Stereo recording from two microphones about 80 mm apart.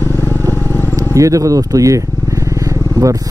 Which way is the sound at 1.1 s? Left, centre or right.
Right.